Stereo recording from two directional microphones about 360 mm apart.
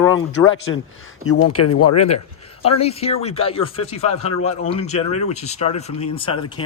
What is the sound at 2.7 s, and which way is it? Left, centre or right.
Speech, centre.